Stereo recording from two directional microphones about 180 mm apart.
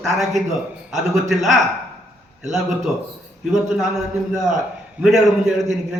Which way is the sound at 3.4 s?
5° right (ahead or behind).